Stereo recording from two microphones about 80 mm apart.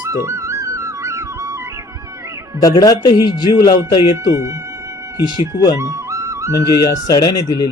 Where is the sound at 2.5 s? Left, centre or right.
Left.